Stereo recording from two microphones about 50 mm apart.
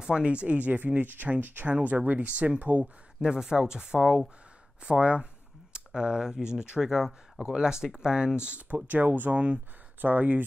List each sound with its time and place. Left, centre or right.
0.0 s speech: right
3.2 s speech: centre
4.8 s a sound: right
5.9 s speech: centre
8.5 s speech: right